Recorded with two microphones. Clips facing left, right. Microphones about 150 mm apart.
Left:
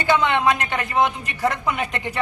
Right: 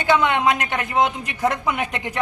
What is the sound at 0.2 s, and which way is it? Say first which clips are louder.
A woman's voice: even; 15° right (ahead or behind).